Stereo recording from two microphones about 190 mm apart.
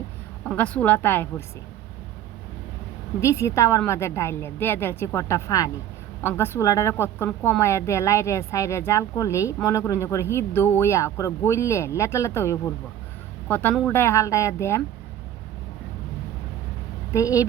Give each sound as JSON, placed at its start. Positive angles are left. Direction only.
{"t": 0.4, "sound": "speech", "side_deg": 5}
{"t": 3.2, "sound": "speech", "side_deg": 15}
{"t": 17.1, "sound": "speech", "side_deg": 15}